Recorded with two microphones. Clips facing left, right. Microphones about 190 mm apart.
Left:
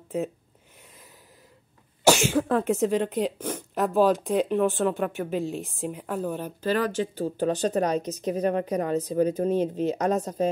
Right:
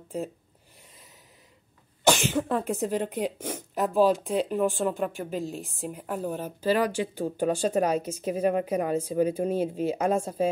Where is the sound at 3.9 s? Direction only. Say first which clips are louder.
Left 1 dB; centre (ahead or behind).